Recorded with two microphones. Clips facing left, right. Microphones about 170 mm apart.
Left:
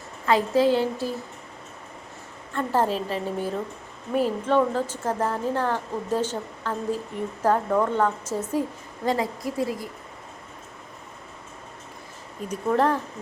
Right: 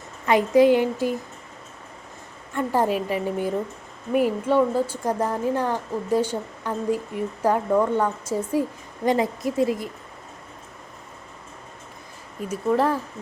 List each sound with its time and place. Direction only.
0.3 s speech: 15° right (ahead or behind)
2.6 s speech: 15° right (ahead or behind)
9.0 s a woman's voice: 20° right (ahead or behind)
12.5 s speech: 5° right (ahead or behind)